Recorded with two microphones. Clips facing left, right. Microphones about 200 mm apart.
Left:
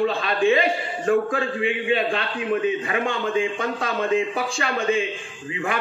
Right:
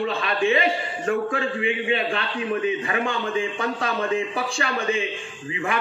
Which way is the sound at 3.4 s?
35° right (ahead or behind).